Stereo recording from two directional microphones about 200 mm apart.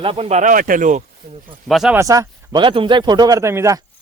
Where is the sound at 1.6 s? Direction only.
Centre (ahead or behind).